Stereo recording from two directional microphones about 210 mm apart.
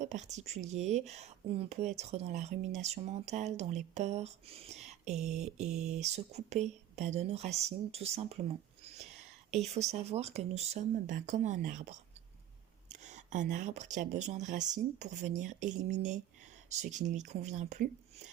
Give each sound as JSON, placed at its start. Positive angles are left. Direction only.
{"t": 0.0, "sound": "speech", "side_deg": -35}
{"t": 8.8, "sound": "whispering", "side_deg": -30}
{"t": 9.7, "sound": "speech", "side_deg": -30}